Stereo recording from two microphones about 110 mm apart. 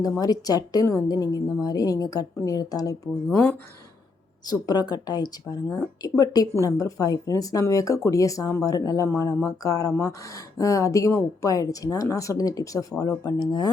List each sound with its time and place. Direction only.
0.2 s speech: 35° left (ahead or behind)
4.4 s speech: 35° left (ahead or behind)